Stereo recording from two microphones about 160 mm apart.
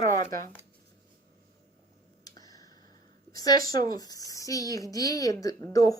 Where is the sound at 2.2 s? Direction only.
25° left (ahead or behind).